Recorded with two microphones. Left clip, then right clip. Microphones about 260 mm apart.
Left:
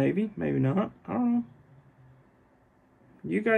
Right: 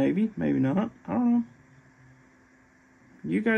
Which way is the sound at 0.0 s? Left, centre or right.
Right.